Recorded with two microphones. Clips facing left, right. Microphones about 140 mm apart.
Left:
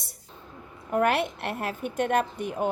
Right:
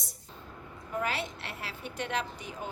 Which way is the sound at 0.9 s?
60° left (ahead or behind).